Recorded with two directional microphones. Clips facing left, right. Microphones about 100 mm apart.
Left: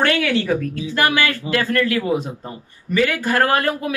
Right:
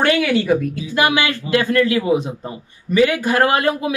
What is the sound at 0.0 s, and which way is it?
Speech, 10° right (ahead or behind).